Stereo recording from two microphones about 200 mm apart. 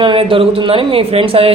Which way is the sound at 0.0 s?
25° right (ahead or behind).